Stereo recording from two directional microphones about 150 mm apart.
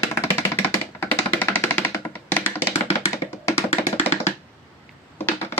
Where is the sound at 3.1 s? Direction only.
15° left (ahead or behind).